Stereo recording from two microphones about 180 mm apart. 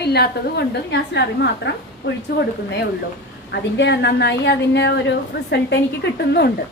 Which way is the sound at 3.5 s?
75° left (ahead or behind).